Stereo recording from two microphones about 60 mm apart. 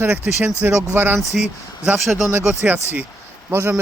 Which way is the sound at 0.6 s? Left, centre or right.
Right.